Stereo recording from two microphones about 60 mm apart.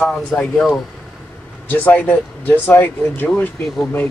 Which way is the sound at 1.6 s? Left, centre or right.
Left.